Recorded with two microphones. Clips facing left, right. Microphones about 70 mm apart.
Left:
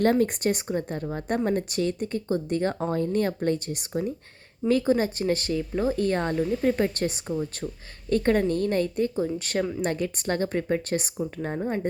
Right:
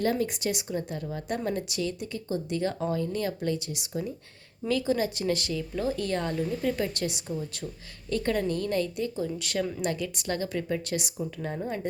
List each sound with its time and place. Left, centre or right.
0.0 s speech: left